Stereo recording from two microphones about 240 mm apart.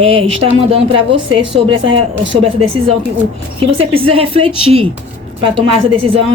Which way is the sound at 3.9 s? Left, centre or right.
Right.